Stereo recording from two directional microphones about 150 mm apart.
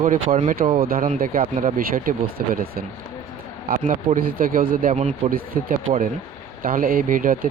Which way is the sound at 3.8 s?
65° right (ahead or behind).